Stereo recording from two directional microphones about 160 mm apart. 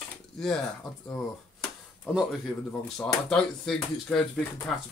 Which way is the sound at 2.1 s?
5° right (ahead or behind).